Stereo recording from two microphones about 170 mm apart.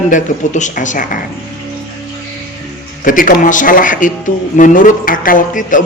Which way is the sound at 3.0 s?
50° left (ahead or behind).